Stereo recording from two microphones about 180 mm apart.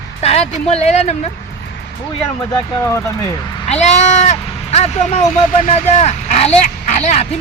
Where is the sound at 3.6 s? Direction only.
35° left (ahead or behind).